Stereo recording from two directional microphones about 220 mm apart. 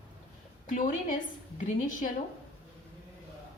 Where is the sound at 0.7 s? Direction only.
35° left (ahead or behind).